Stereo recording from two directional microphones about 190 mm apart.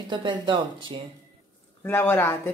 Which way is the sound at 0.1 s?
25° right (ahead or behind).